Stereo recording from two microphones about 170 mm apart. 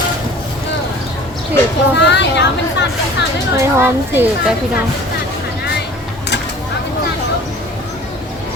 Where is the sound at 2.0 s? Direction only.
90° left.